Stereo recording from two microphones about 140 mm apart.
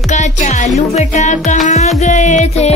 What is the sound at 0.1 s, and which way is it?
Music, 60° left (ahead or behind).